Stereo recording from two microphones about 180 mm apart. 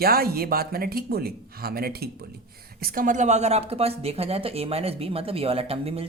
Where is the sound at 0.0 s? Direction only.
55° right (ahead or behind).